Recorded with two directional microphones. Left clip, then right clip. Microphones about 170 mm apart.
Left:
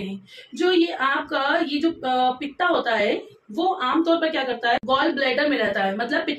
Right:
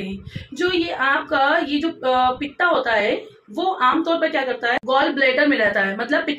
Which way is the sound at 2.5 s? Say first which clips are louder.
Right 3 dB; 55° right (ahead or behind).